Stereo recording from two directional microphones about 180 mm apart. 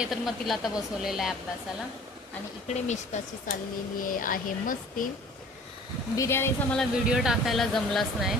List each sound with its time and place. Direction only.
0.0 s speech: centre (ahead or behind)
2.6 s speech: 40° left (ahead or behind)
6.1 s speech: 15° left (ahead or behind)
6.7 s speech: centre (ahead or behind)